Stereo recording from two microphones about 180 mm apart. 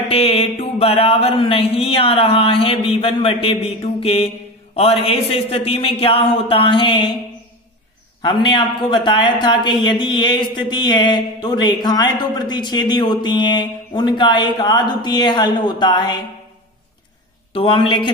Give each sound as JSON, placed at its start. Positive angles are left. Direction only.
{"t": 0.1, "sound": "mantra", "side_deg": 30}
{"t": 8.2, "sound": "a man's voice", "side_deg": 25}
{"t": 17.5, "sound": "a man's voice", "side_deg": 30}